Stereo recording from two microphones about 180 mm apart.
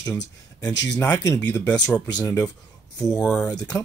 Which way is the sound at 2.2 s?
15° left (ahead or behind).